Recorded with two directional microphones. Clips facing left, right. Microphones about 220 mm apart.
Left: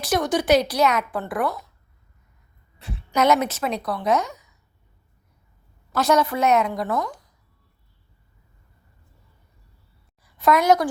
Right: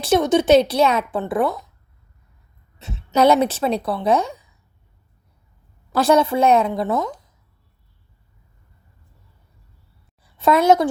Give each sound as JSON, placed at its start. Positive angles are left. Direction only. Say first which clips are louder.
{"t": 0.0, "sound": "a woman's voice", "louder": "right 6 dB", "side_deg": -25}
{"t": 2.7, "sound": "a woman's voice", "louder": "right 4 dB", "side_deg": -25}
{"t": 6.0, "sound": "a woman's voice", "louder": "right 4 dB", "side_deg": -30}
{"t": 10.2, "sound": "a woman's voice", "louder": "right 3 dB", "side_deg": -25}